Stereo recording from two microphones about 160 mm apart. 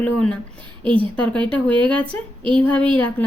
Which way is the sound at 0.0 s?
5° left (ahead or behind).